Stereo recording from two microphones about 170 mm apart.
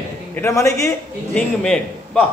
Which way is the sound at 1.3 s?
5° left (ahead or behind).